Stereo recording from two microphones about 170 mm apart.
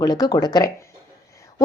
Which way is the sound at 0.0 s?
25° left (ahead or behind).